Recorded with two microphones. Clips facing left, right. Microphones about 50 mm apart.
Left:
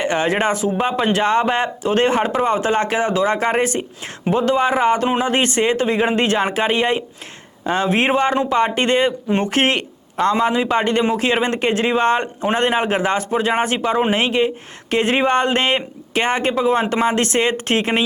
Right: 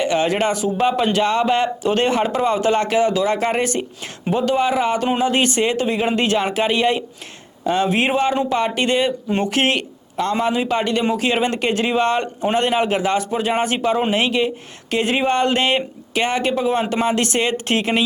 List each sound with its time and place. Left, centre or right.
0.0 s speech: left
7.6 s speech: left